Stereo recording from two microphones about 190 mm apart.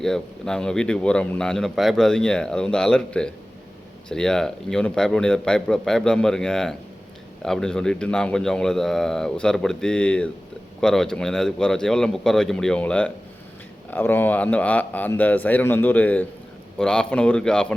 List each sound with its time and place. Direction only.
0.0 s a man's voice: 5° left (ahead or behind)